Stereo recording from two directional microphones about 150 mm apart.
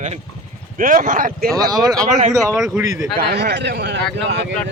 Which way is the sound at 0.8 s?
65° right (ahead or behind).